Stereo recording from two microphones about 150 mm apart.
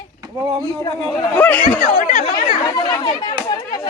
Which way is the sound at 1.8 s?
60° left (ahead or behind).